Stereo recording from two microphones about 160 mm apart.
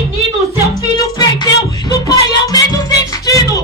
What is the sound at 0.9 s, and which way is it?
Music, 25° left (ahead or behind).